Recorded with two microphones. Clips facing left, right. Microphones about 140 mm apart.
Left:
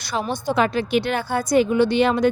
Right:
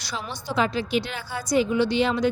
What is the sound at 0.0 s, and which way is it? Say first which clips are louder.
A woman's voice: left 9 dB; 55° left (ahead or behind).